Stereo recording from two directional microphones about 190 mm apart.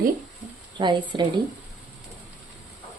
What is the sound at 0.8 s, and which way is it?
Speech, 25° right (ahead or behind).